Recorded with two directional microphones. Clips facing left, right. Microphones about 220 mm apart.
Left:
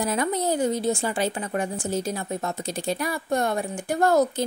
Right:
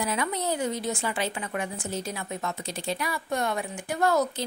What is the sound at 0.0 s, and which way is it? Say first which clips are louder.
Speech: left 4 dB; 45° left (ahead or behind).